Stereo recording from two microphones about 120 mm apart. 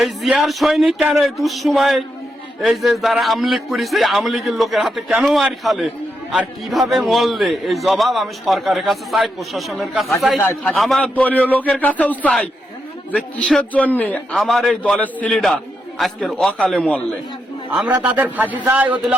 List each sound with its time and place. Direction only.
0.0 s a man's voice: 5° right (ahead or behind)
10.4 s a man's voice: 20° left (ahead or behind)
10.7 s a man's voice: centre (ahead or behind)
11.0 s a man's voice: 15° left (ahead or behind)
13.7 s a man's voice: 15° left (ahead or behind)
14.3 s a man's voice: centre (ahead or behind)
14.9 s a man's voice: 10° left (ahead or behind)
16.0 s a man's voice: centre (ahead or behind)
17.9 s a man's voice: 15° right (ahead or behind)